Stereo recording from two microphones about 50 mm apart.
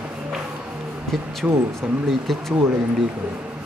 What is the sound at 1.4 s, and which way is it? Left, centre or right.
Speech, centre.